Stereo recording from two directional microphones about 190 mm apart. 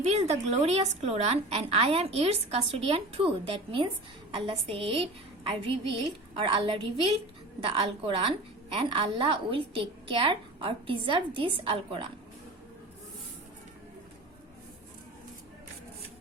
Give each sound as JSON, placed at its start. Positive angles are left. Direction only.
{"t": 0.0, "sound": "a woman's voice", "side_deg": -35}
{"t": 7.6, "sound": "a woman's voice", "side_deg": -30}